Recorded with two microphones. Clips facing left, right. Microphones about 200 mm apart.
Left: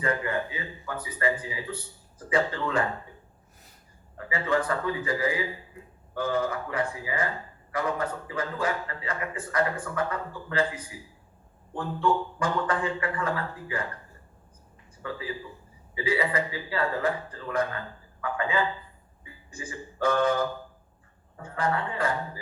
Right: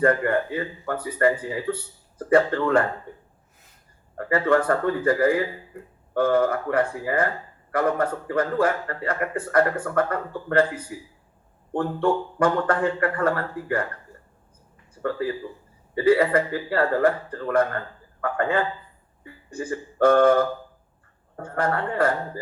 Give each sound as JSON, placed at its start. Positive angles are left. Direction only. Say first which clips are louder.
{"t": 0.0, "sound": "a man's voice", "louder": "right 8 dB", "side_deg": -55}
{"t": 4.2, "sound": "a man's voice", "louder": "right 7 dB", "side_deg": -55}
{"t": 15.0, "sound": "a man's voice", "louder": "right 9 dB", "side_deg": -55}
{"t": 19.2, "sound": "a sound", "louder": "right 9 dB", "side_deg": -60}
{"t": 21.3, "sound": "a man's voice", "louder": "right 4 dB", "side_deg": -55}